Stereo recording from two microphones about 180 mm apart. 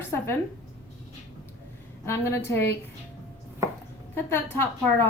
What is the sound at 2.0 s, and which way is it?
Speech, 10° left (ahead or behind).